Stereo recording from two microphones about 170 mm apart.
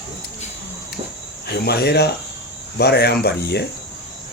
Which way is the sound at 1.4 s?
70° left (ahead or behind).